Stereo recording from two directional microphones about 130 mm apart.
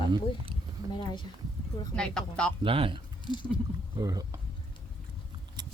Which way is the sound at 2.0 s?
5° left (ahead or behind).